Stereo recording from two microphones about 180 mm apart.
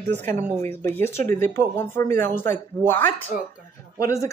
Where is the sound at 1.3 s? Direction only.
15° left (ahead or behind).